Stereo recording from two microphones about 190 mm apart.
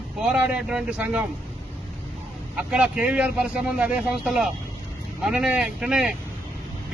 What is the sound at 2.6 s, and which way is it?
Speech, 5° right (ahead or behind).